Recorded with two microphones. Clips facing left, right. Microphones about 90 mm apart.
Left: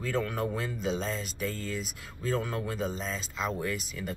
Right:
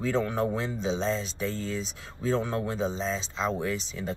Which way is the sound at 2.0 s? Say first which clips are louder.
Right 4 dB; 25° right (ahead or behind).